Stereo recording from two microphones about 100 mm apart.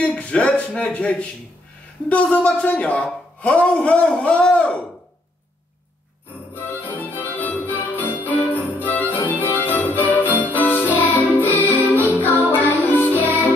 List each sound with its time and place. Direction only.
0.0 s a man's voice: 10° left (ahead or behind)
6.5 s music: 20° left (ahead or behind)
8.3 s jingle bell: 15° left (ahead or behind)
9.1 s music: 15° left (ahead or behind)